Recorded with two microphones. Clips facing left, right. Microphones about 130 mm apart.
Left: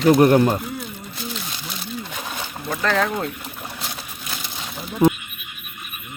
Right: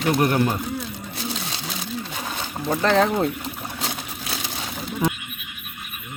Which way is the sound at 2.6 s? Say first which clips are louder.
Right 3 dB; 30° right (ahead or behind).